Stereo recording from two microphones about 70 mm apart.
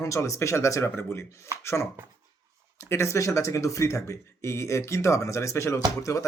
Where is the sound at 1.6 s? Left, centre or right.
Left.